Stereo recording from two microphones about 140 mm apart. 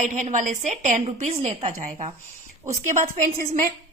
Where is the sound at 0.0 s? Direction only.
60° right (ahead or behind).